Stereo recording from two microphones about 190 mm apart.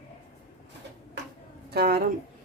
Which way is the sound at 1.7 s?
55° right (ahead or behind).